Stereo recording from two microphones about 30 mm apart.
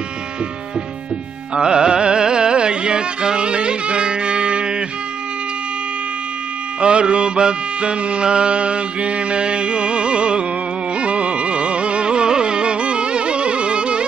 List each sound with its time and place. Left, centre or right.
1.5 s music: right
6.8 s music: right